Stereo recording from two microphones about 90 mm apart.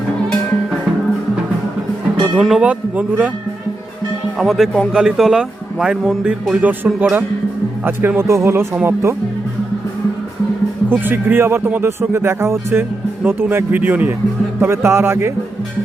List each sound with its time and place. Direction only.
2.4 s speech: 5° right (ahead or behind)
2.6 s a man's voice: 15° right (ahead or behind)
4.4 s a man's voice: centre (ahead or behind); by 9.1 s 25° right (ahead or behind)
10.8 s speech: 25° right (ahead or behind)